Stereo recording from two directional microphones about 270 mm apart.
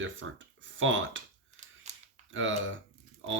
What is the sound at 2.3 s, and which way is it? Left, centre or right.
Speech, right.